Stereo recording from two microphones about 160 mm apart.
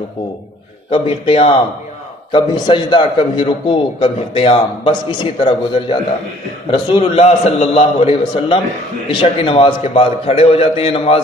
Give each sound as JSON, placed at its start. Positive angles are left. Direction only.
{"t": 0.9, "sound": "a man's voice", "side_deg": 35}